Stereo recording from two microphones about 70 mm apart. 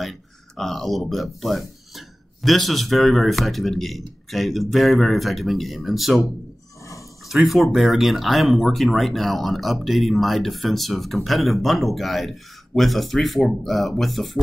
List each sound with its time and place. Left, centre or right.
0.0 s speech: centre
6.8 s a sound: left
7.2 s speech: centre